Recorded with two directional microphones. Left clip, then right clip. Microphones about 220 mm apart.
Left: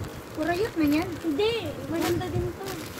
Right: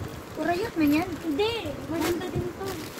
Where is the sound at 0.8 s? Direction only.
40° right (ahead or behind).